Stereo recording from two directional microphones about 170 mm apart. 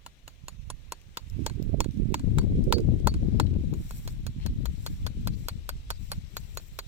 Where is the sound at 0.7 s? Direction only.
35° right (ahead or behind).